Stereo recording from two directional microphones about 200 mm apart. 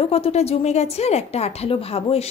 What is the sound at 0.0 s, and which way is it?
A woman's voice, 30° left (ahead or behind).